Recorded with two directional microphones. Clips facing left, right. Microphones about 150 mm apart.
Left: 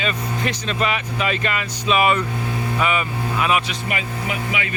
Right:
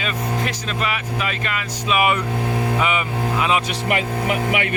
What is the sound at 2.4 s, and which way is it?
Vehicle, 55° right (ahead or behind).